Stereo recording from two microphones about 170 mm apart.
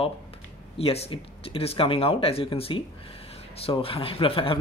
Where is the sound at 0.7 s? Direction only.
35° left (ahead or behind).